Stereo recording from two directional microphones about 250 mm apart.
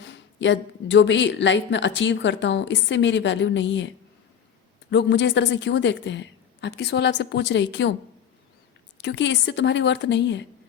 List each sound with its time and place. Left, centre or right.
0.0 s speech: left
9.0 s speech: left